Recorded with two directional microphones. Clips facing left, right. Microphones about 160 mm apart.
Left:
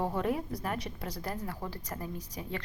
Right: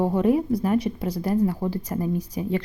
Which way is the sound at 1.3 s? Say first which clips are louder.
Right 17 dB; 20° right (ahead or behind).